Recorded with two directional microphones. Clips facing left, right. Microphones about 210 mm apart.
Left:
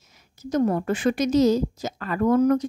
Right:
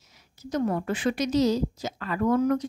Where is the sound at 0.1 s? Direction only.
45° left (ahead or behind).